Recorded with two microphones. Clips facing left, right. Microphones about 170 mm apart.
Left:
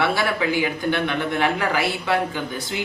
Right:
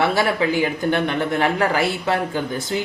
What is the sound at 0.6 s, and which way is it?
A man's voice, 40° right (ahead or behind).